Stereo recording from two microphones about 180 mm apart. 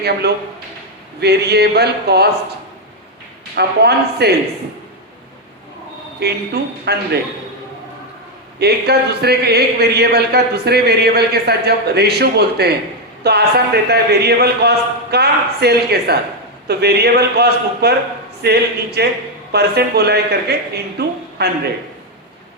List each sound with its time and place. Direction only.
0.0 s a man's voice: 65° right (ahead or behind)
3.5 s a man's voice: 65° right (ahead or behind)
6.1 s a man's voice: 65° right (ahead or behind)
8.5 s a man's voice: 65° right (ahead or behind)